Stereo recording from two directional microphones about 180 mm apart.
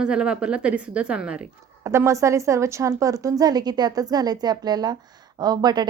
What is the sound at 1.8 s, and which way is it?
Speech, 15° right (ahead or behind).